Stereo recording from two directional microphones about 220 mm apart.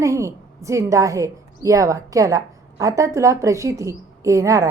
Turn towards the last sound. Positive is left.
turn(degrees=-15)  # may be behind; listen again after turning